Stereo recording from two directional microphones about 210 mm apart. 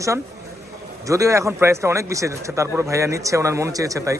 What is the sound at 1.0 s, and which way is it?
A man's voice, 15° right (ahead or behind).